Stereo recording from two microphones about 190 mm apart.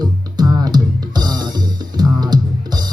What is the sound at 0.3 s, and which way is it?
Music, 20° right (ahead or behind).